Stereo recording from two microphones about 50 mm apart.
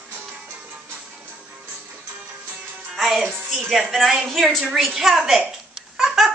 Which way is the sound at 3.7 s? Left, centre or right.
Centre.